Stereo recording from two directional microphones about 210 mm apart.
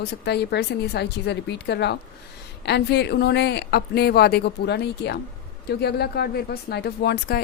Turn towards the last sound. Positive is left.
turn(degrees=50)  # may be behind; listen again after turning